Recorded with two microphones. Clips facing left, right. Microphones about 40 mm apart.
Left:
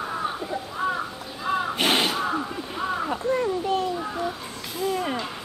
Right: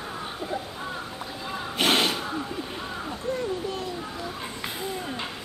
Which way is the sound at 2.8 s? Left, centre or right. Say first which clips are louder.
Left 6 dB; left.